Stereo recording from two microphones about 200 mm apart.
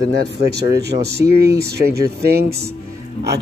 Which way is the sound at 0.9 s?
30° right (ahead or behind).